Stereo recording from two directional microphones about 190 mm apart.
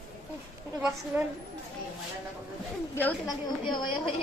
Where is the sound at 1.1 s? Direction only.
10° right (ahead or behind).